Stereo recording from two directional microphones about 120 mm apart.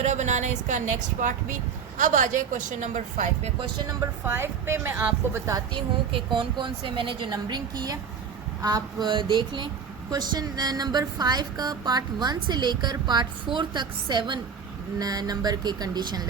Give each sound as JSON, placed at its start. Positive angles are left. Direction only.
{"t": 0.0, "sound": "speech", "side_deg": -75}
{"t": 4.2, "sound": "a woman's voice", "side_deg": -20}
{"t": 5.5, "sound": "a woman's voice", "side_deg": -30}
{"t": 6.1, "sound": "speech", "side_deg": -40}
{"t": 7.3, "sound": "a woman's voice", "side_deg": -35}